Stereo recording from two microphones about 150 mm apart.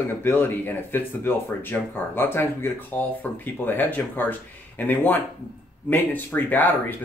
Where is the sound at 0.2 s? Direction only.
15° left (ahead or behind).